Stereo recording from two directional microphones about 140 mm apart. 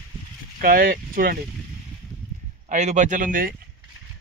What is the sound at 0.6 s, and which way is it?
Speech, 90° right.